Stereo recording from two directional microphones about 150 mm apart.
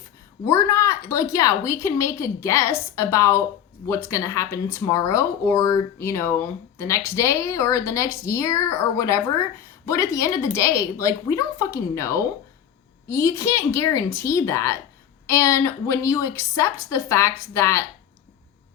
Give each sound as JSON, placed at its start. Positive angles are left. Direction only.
{"t": 0.4, "sound": "a woman's voice", "side_deg": 20}